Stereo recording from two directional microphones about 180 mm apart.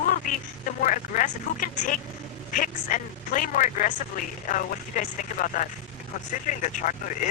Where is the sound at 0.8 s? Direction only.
45° left (ahead or behind).